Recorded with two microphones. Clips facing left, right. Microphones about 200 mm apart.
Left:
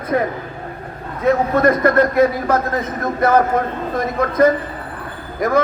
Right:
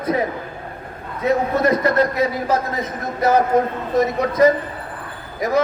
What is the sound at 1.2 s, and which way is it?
A man's voice, 55° left (ahead or behind).